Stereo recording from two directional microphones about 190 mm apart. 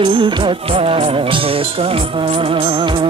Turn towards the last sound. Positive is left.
turn(degrees=-25)  # may be behind; listen again after turning